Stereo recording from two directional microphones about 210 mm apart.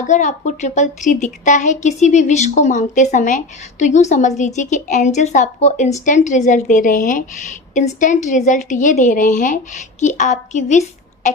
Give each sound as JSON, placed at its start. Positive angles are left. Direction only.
{"t": 0.1, "sound": "a woman's voice", "side_deg": 35}